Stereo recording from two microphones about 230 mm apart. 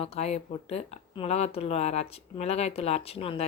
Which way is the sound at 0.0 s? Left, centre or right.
Left.